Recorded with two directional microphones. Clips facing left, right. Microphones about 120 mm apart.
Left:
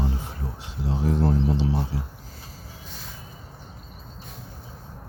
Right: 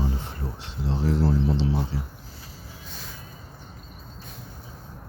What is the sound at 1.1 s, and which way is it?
Speech, 20° left (ahead or behind).